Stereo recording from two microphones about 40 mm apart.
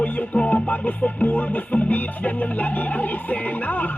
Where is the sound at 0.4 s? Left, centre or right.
Left.